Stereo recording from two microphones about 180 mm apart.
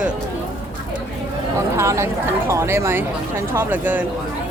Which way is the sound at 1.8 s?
15° right (ahead or behind).